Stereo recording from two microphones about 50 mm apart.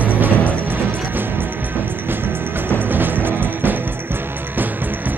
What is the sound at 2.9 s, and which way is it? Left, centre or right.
Music, right.